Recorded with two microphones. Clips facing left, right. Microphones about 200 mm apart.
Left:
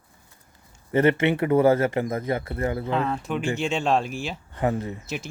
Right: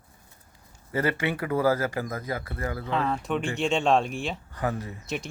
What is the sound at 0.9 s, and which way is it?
Speech, 25° left (ahead or behind).